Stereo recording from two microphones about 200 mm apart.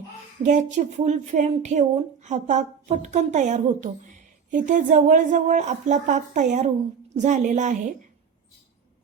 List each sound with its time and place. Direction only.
0.4 s speech: 40° right (ahead or behind)